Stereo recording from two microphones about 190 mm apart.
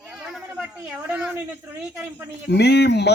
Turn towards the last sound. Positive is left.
turn(degrees=60)  # may be behind; listen again after turning